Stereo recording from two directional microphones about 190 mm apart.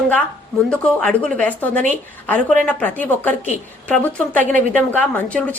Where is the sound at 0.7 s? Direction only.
5° left (ahead or behind).